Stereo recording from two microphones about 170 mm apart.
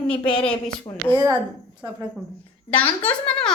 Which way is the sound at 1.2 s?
25° right (ahead or behind).